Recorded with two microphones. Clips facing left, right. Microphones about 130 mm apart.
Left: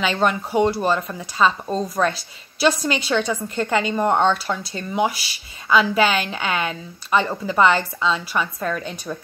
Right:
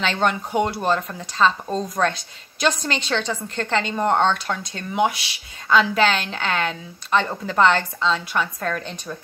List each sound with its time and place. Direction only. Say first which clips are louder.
0.0 s speech: left 1 dB; 5° left (ahead or behind)